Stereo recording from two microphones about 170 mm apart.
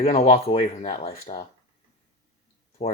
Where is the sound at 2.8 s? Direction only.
40° left (ahead or behind).